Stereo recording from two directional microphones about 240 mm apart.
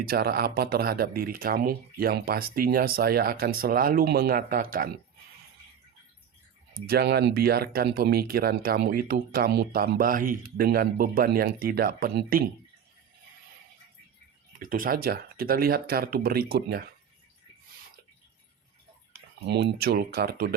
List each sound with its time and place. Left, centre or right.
0.0 s speech: right
6.8 s speech: right
14.6 s speech: right
19.5 s speech: right